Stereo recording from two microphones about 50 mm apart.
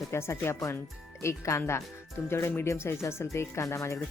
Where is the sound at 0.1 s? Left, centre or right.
Left.